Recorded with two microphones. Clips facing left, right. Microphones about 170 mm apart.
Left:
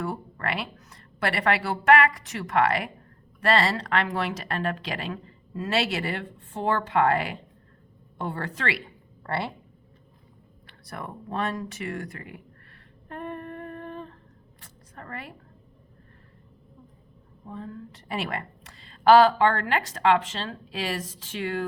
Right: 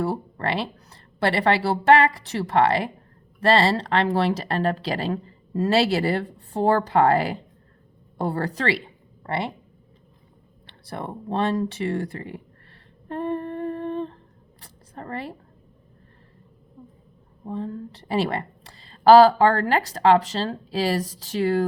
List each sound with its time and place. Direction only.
0.0 s a woman's voice: 30° right (ahead or behind)
9.2 s speech: 20° right (ahead or behind)
10.7 s speech: 30° right (ahead or behind)
13.1 s humming: 30° right (ahead or behind)
14.6 s a sound: 30° right (ahead or behind)
17.4 s a woman's voice: 30° right (ahead or behind)